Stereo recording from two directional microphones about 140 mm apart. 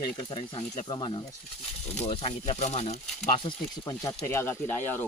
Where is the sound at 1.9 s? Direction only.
50° left (ahead or behind).